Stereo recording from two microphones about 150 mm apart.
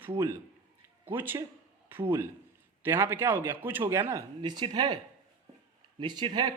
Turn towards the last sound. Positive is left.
turn(degrees=-30)  # may be behind; listen again after turning